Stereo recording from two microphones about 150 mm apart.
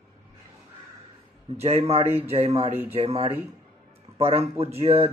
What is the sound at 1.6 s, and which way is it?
Speech, 40° right (ahead or behind).